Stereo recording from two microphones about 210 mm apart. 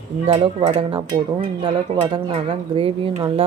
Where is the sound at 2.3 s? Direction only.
25° right (ahead or behind).